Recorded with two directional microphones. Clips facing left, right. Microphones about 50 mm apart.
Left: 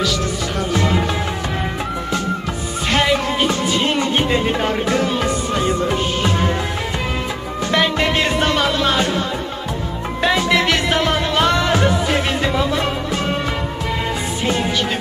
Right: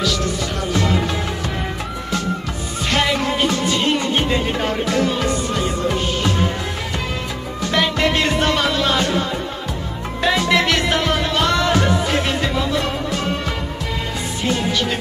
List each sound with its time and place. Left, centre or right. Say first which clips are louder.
2.9 s music: left 2 dB; centre
5.2 s music: left 2 dB; centre
7.7 s music: left 1 dB; centre
10.2 s music: even; centre